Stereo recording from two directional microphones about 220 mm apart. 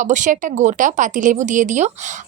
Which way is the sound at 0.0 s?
35° right (ahead or behind).